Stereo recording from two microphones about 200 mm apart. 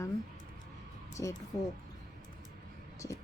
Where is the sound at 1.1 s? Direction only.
15° left (ahead or behind).